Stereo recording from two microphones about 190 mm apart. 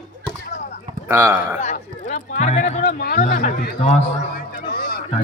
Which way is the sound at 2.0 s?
40° left (ahead or behind).